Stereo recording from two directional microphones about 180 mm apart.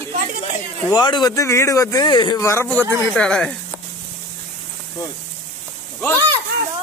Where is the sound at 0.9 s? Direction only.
25° left (ahead or behind).